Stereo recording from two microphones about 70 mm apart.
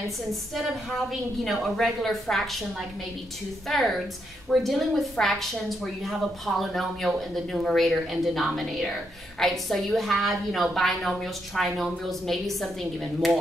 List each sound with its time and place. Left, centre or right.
0.3 s a woman's voice: centre
3.6 s a woman's voice: centre